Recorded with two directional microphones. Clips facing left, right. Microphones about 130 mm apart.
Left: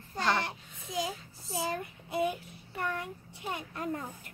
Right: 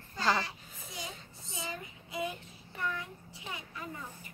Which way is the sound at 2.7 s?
65° left (ahead or behind).